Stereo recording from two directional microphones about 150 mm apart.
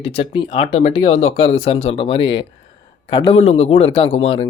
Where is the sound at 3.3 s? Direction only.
45° left (ahead or behind).